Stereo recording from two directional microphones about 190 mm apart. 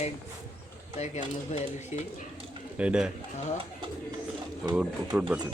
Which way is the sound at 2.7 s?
5° right (ahead or behind).